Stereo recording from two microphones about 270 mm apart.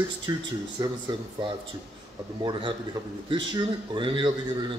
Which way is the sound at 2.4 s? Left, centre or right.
Centre.